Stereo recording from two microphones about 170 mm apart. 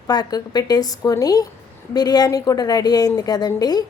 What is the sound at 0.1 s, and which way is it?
Speech, 25° left (ahead or behind).